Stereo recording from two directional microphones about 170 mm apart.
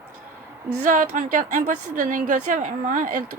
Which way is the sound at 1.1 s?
50° right (ahead or behind).